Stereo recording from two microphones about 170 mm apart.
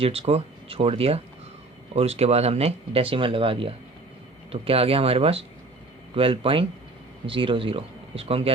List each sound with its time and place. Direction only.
0.0 s speech: 35° right (ahead or behind)